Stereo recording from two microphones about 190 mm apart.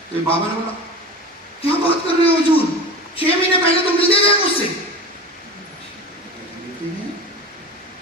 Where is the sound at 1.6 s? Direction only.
30° left (ahead or behind).